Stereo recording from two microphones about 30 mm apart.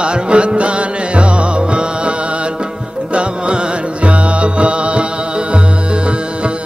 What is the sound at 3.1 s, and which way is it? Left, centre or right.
Music, right.